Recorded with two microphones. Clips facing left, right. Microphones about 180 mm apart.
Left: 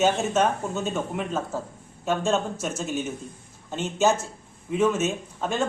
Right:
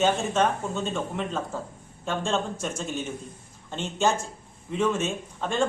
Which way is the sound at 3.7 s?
5° left (ahead or behind).